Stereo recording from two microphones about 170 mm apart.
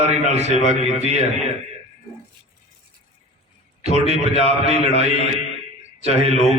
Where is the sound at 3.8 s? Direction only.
40° right (ahead or behind).